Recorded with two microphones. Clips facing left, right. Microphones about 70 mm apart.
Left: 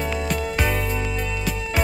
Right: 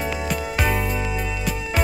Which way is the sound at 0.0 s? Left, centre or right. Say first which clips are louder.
Left 1 dB; centre.